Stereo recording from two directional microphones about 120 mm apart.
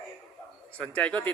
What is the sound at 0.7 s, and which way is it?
Speech, 10° left (ahead or behind).